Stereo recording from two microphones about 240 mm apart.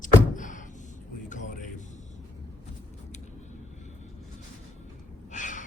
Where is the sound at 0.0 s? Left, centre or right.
Left.